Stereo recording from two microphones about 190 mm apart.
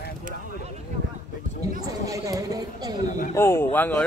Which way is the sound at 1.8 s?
15° right (ahead or behind).